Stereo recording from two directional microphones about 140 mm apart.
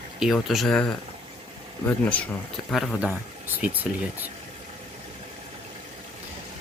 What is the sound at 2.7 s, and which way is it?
Speech, centre (ahead or behind).